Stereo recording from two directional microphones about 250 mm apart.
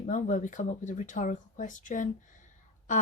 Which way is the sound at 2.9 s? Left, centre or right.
Left.